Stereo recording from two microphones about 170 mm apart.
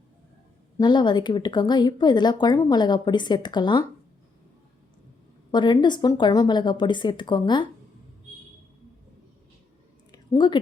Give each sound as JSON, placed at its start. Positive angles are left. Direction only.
{"t": 0.8, "sound": "speech", "side_deg": 25}
{"t": 5.5, "sound": "speech", "side_deg": 25}
{"t": 10.1, "sound": "a sound", "side_deg": 25}